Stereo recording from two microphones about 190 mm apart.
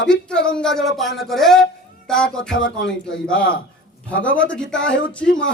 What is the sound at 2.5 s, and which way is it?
Speech, 80° left.